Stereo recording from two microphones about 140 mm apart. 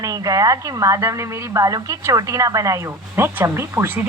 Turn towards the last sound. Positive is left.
turn(degrees=-15)  # may be behind; listen again after turning